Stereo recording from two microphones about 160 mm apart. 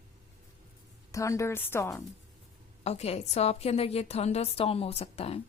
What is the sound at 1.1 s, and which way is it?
Speech, 20° left (ahead or behind).